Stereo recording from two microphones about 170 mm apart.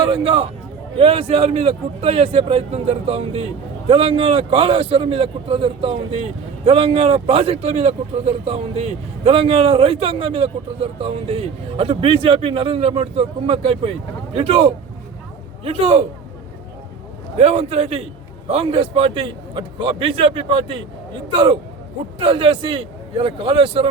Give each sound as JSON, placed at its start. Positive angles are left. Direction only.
{"t": 0.0, "sound": "speech", "side_deg": -35}
{"t": 17.3, "sound": "speech", "side_deg": -35}